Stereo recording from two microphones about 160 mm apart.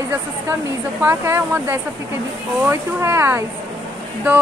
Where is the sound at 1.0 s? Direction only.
15° right (ahead or behind).